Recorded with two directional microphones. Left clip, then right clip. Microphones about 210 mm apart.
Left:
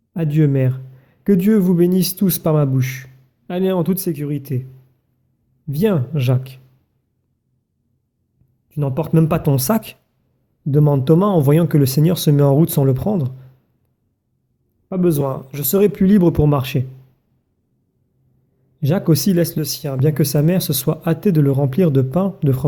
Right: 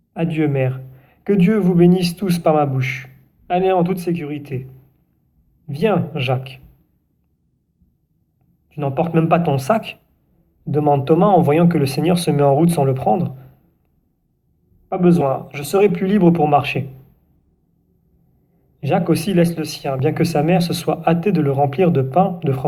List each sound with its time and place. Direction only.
0.1 s a man's voice: 55° left (ahead or behind)
5.6 s speech: 55° left (ahead or behind)
8.7 s speech: 55° left (ahead or behind)
14.8 s speech: 55° left (ahead or behind)
18.8 s speech: 50° left (ahead or behind)